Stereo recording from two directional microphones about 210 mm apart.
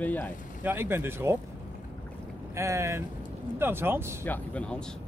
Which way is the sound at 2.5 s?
15° right (ahead or behind).